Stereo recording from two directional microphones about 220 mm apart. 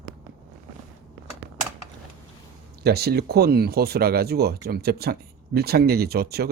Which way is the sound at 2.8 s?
45° right (ahead or behind).